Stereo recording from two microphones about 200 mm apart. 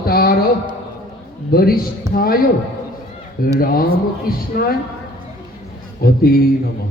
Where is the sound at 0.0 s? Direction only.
50° left (ahead or behind).